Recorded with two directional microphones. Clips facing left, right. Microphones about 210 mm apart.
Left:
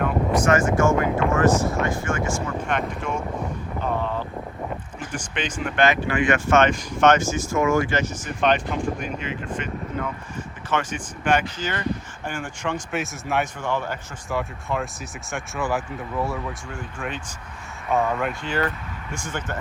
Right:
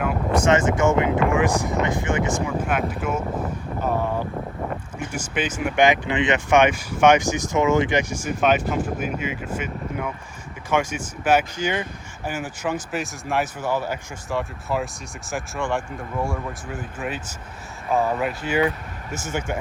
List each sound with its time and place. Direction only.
0.4 s speech: 20° right (ahead or behind)
2.5 s speech: 5° right (ahead or behind)
3.8 s a sound: 10° right (ahead or behind)
4.9 s speech: 10° right (ahead or behind)